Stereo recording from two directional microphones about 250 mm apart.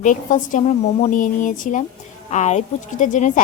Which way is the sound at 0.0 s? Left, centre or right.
Left.